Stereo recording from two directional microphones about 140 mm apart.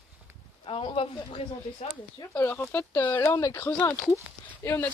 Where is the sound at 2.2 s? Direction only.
15° left (ahead or behind).